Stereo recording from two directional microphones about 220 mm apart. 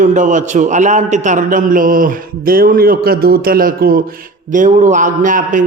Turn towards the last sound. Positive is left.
turn(degrees=-35)  # may be behind; listen again after turning